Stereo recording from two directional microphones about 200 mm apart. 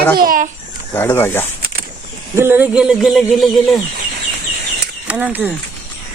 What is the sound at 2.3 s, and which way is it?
Speech, 10° right (ahead or behind).